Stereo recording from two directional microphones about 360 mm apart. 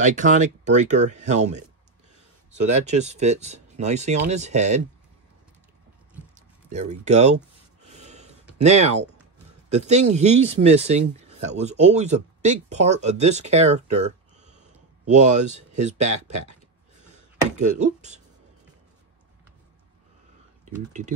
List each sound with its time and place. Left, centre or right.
0.0 s speech: right
6.3 s a sound: centre
9.7 s speech: centre
17.4 s speech: centre
20.6 s speech: centre